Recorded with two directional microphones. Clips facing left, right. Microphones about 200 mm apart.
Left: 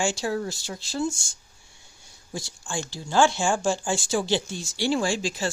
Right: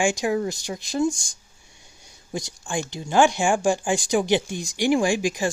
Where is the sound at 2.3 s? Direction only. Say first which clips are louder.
Right 4 dB; 20° right (ahead or behind).